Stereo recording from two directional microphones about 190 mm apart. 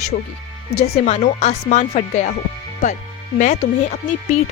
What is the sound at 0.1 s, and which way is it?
Speech, 50° left (ahead or behind).